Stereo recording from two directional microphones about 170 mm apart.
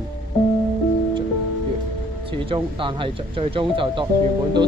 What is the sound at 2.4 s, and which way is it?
Speech, 30° right (ahead or behind).